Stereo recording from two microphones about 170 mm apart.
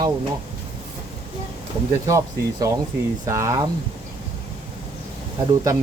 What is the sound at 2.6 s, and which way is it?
Speech, 20° right (ahead or behind).